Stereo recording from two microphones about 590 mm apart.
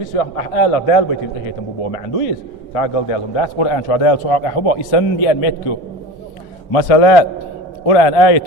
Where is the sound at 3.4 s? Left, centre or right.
Left.